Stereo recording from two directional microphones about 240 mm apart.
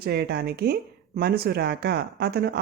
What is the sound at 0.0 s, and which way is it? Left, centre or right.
Speech, right.